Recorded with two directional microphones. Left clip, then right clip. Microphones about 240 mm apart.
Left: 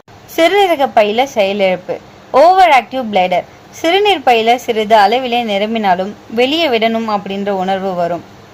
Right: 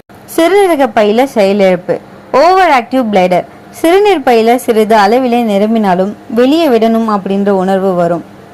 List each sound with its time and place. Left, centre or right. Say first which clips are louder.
0.3 s a woman's voice: right 3 dB; centre